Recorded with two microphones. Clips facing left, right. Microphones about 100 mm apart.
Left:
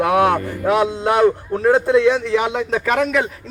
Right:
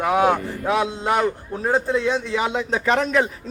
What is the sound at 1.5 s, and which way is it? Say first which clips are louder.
Speech: left 8 dB; 65° left (ahead or behind).